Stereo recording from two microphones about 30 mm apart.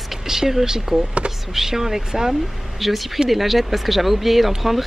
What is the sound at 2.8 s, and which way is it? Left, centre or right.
Speech, centre.